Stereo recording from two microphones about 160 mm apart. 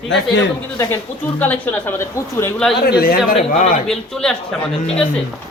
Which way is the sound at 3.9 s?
5° left (ahead or behind).